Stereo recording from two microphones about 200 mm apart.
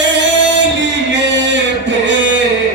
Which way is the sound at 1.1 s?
60° right (ahead or behind).